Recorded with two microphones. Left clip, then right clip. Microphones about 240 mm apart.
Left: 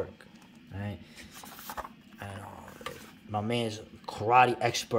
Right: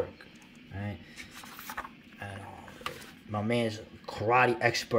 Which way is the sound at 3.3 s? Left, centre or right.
Centre.